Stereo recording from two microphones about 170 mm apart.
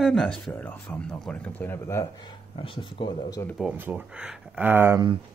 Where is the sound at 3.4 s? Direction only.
Centre (ahead or behind).